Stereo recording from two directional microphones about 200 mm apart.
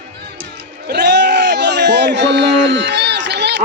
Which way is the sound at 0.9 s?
55° right (ahead or behind).